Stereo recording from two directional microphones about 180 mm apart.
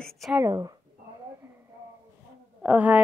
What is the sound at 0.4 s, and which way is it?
Speech, 20° right (ahead or behind).